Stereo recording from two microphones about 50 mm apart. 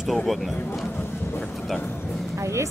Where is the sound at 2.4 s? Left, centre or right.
Right.